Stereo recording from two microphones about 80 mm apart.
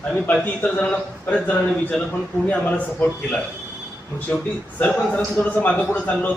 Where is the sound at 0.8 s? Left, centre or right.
Centre.